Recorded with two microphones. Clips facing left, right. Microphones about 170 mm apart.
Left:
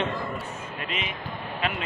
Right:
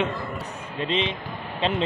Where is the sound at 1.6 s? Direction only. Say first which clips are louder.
Right 6 dB; 30° right (ahead or behind).